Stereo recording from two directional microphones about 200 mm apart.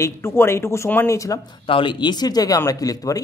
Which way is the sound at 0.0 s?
10° left (ahead or behind).